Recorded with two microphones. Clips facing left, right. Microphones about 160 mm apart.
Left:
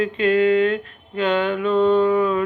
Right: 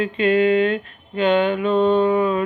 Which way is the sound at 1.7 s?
25° right (ahead or behind).